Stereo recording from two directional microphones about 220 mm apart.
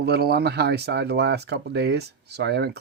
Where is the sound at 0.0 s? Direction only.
45° right (ahead or behind).